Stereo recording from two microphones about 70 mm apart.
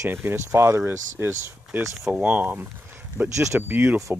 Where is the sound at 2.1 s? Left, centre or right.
Right.